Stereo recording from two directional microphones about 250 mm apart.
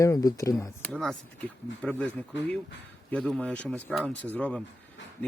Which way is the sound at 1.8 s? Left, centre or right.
Centre.